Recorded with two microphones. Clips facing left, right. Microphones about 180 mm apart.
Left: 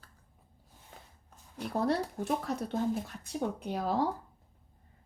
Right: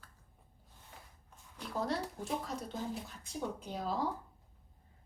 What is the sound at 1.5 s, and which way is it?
A child's voice, 55° left (ahead or behind).